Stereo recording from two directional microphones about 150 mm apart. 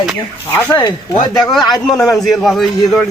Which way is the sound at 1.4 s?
Centre (ahead or behind).